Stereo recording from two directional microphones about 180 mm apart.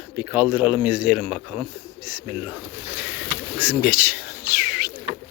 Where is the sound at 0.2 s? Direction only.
10° right (ahead or behind).